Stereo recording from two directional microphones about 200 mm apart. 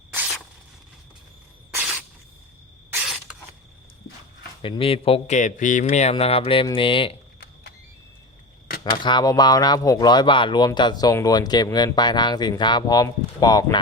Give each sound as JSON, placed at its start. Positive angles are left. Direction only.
{"t": 0.1, "sound": "a sound", "side_deg": -10}
{"t": 1.7, "sound": "spray", "side_deg": 0}
{"t": 2.9, "sound": "creak", "side_deg": -5}
{"t": 4.6, "sound": "speech", "side_deg": 25}
{"t": 8.8, "sound": "speech", "side_deg": 25}